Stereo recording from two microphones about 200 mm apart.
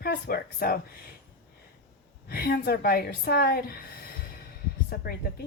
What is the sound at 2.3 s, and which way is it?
Speech, 50° left (ahead or behind).